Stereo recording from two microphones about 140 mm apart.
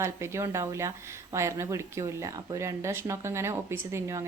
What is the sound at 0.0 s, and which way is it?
A woman's voice, 20° right (ahead or behind).